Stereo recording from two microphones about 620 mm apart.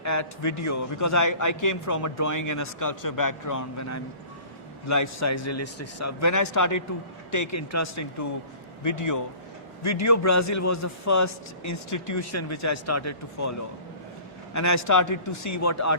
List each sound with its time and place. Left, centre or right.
0.0 s a man's voice: left